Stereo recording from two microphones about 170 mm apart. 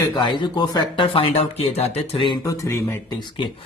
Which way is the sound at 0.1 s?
25° left (ahead or behind).